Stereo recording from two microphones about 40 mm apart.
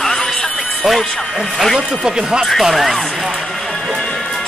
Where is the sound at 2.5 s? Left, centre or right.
Centre.